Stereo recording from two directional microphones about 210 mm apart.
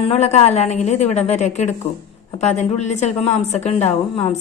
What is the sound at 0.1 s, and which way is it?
A woman's voice, 30° left (ahead or behind).